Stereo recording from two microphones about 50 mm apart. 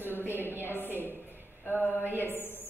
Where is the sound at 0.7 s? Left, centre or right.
Left.